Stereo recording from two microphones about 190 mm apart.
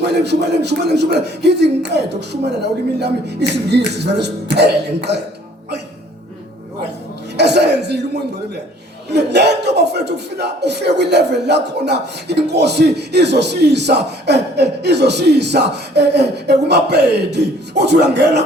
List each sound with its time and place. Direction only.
0.1 s speech: 65° right (ahead or behind)
7.3 s a sound: 60° right (ahead or behind)
9.0 s speech: 60° right (ahead or behind)